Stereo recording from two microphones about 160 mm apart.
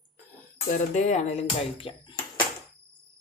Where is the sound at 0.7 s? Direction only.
45° left (ahead or behind).